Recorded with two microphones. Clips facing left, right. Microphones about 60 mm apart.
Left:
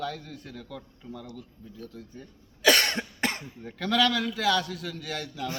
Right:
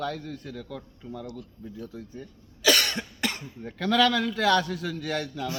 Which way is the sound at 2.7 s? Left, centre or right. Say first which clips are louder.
Left 1 dB; left.